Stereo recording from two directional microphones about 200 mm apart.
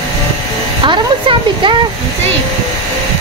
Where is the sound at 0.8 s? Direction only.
25° right (ahead or behind).